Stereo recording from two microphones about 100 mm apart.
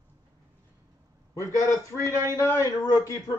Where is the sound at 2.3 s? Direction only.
30° left (ahead or behind).